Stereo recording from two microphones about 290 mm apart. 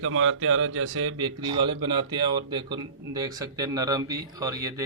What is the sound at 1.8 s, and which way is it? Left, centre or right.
Speech, centre.